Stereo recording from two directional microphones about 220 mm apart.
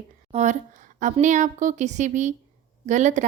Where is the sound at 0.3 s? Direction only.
30° right (ahead or behind).